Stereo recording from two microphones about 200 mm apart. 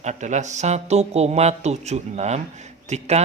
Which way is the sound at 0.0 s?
35° right (ahead or behind).